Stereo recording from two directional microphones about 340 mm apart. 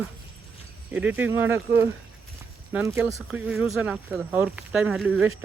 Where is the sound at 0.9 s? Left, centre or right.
Centre.